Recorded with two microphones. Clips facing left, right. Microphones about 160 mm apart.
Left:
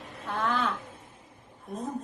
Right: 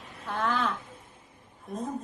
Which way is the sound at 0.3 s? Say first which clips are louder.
Even; centre (ahead or behind).